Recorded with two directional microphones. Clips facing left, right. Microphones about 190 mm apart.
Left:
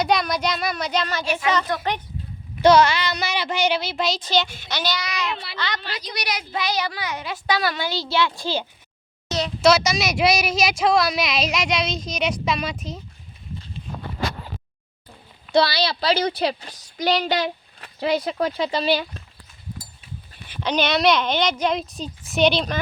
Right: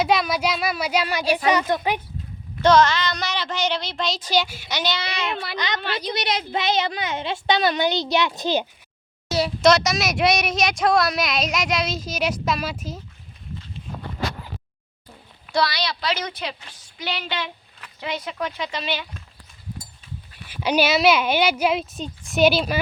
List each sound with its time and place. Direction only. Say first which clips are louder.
0.0 s speech: right 1 dB; 5° right (ahead or behind)
1.2 s speech: right 3 dB; 35° right (ahead or behind)
1.7 s a woman's voice: right 3 dB; 20° right (ahead or behind)
2.6 s speech: left 1 dB; 10° left (ahead or behind)
4.2 s speech: even; 10° right (ahead or behind)
4.8 s a woman's voice: even; 25° right (ahead or behind)
5.3 s speech: right 2 dB; 50° right (ahead or behind)
5.5 s a woman's voice: right 2 dB; 20° right (ahead or behind)
5.8 s a woman's voice: right 6 dB; 60° right (ahead or behind)
6.1 s a woman's voice: right 3 dB; 25° right (ahead or behind)
9.3 s speech: right 1 dB; 5° right (ahead or behind)
15.5 s a woman's voice: left 4 dB; 30° left (ahead or behind)
20.5 s speech: right 2 dB; 10° right (ahead or behind)